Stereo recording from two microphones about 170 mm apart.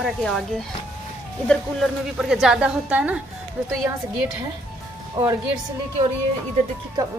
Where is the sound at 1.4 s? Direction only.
Centre (ahead or behind).